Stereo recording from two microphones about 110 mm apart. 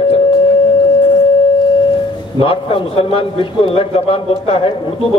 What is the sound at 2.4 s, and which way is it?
A man's voice, 50° left (ahead or behind).